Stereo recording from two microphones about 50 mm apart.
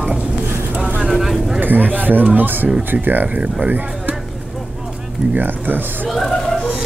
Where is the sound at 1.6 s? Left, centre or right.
Right.